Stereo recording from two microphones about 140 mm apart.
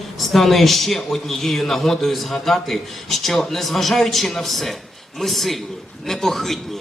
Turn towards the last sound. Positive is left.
turn(degrees=0)  # may be behind; listen again after turning